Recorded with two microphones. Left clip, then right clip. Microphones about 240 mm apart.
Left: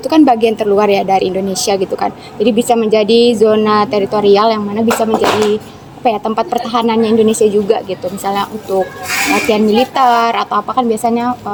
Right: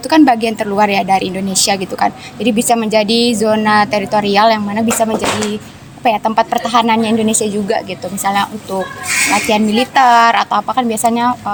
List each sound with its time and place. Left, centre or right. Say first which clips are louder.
0.1 s a woman's voice: left 1 dB; right
9.5 s a woman's voice: left 2 dB; right